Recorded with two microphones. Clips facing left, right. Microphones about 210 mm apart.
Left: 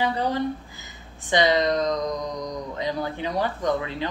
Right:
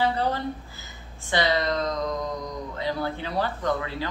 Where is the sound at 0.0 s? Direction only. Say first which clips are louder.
Left 1 dB; 15° left (ahead or behind).